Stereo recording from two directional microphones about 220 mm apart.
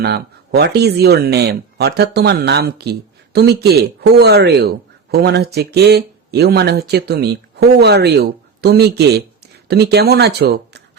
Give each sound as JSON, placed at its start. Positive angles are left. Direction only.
{"t": 0.0, "sound": "speech", "side_deg": -45}